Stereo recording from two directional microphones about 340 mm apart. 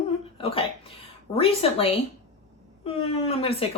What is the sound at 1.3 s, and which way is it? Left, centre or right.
Speech, centre.